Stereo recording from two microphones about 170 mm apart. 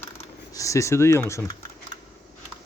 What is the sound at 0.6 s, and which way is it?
Speech, 20° left (ahead or behind).